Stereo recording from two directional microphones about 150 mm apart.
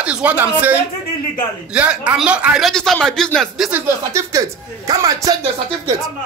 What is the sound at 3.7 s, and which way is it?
Speech, 10° right (ahead or behind).